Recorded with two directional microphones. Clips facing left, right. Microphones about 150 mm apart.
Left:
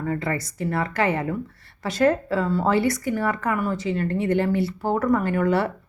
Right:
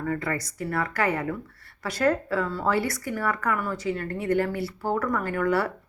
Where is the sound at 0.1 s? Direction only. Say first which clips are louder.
Left 3 dB; 25° left (ahead or behind).